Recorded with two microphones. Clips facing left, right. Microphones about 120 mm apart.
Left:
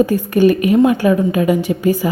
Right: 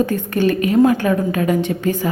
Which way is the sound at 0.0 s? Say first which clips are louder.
Left 5 dB; 10° left (ahead or behind).